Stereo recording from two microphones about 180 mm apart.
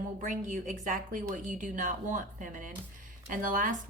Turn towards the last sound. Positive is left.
turn(degrees=-45)  # may be behind; listen again after turning